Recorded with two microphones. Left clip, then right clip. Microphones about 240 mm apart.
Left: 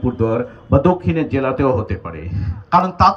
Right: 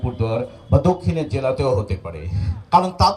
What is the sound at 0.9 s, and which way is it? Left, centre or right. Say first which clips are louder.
A man's voice: left 4 dB; right.